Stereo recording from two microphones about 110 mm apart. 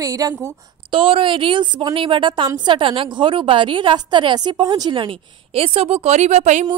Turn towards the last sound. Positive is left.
turn(degrees=-90)